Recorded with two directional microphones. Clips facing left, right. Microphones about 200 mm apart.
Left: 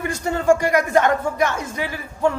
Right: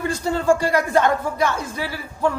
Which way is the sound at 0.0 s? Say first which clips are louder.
Even; 15° left (ahead or behind).